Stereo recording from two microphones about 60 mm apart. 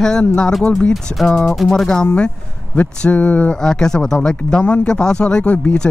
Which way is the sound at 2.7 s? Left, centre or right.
Left.